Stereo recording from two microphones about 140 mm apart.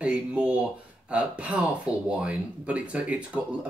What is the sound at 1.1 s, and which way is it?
Speech, 10° right (ahead or behind).